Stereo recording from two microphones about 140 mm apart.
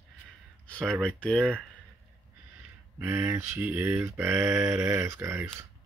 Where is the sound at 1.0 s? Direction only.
5° left (ahead or behind).